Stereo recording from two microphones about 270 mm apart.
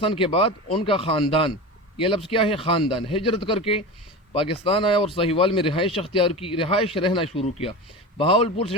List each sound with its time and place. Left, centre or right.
0.0 s speech: centre